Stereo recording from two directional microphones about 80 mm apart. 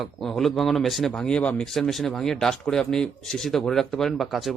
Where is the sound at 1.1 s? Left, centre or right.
Centre.